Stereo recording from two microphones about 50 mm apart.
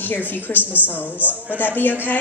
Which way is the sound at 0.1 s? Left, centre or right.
Left.